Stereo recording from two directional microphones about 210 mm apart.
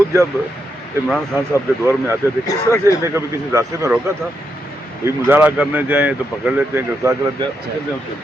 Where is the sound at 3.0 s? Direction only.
15° right (ahead or behind).